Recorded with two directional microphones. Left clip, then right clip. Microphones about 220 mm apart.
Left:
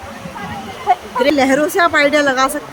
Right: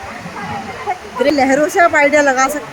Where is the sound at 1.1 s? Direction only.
Centre (ahead or behind).